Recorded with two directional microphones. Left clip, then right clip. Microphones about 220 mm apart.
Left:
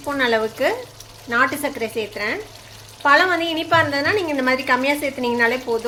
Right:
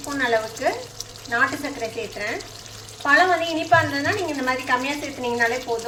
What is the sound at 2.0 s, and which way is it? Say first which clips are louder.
A woman's voice: left 4 dB; 50° left (ahead or behind).